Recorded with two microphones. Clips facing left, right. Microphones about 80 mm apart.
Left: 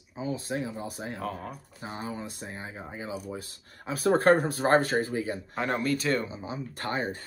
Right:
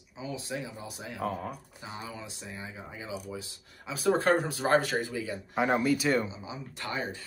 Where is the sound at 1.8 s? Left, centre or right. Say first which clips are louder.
Left 7 dB; left.